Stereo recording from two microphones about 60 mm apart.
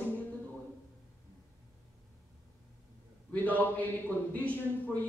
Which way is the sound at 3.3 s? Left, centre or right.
Left.